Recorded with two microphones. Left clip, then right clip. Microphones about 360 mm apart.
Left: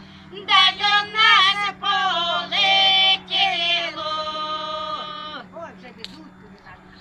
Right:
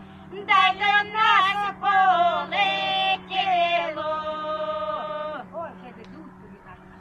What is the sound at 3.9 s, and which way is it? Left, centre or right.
Chant, centre.